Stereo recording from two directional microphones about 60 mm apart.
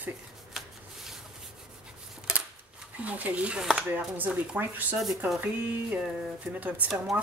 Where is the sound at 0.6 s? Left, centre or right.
Centre.